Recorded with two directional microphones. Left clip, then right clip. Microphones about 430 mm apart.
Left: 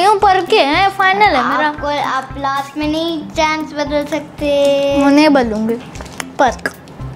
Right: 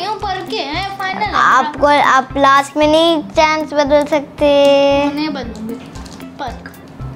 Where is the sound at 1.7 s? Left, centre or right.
Right.